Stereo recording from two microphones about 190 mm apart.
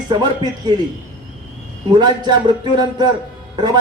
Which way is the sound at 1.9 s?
20° right (ahead or behind).